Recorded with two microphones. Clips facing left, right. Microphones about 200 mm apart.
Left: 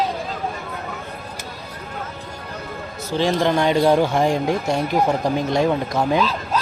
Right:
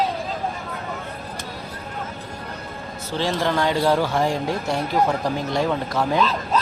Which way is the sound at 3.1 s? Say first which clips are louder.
Left 4 dB; 15° left (ahead or behind).